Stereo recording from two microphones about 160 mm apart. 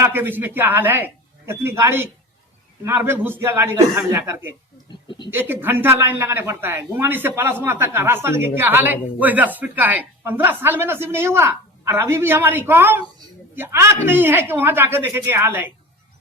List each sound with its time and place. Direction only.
0.0 s a woman's voice: 10° right (ahead or behind)
5.0 s a sound: 30° left (ahead or behind)
5.3 s a woman's voice: 15° right (ahead or behind)